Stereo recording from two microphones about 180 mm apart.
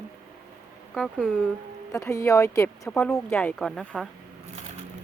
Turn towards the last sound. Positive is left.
turn(degrees=0)  # may be behind; listen again after turning